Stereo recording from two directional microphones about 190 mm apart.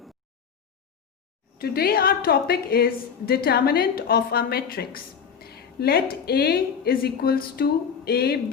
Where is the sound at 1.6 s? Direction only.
55° left (ahead or behind).